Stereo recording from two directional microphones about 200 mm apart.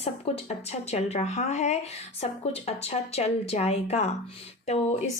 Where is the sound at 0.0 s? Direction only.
30° left (ahead or behind).